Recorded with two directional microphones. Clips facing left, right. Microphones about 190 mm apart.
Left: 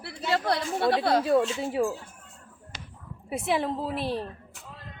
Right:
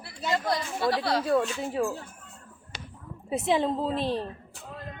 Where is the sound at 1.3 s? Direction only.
20° left (ahead or behind).